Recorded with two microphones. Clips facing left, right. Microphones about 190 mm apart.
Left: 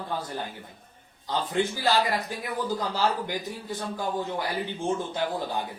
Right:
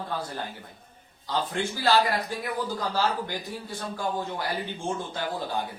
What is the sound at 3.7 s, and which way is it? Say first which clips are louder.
Speech: even; 15° left (ahead or behind).